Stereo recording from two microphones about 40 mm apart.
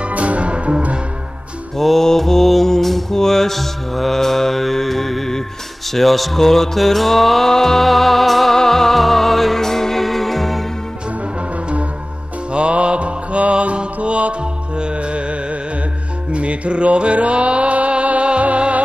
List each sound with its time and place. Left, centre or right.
0.0 s music: right
1.8 s mantra: centre
5.9 s music: centre
12.5 s mantra: right
16.3 s music: right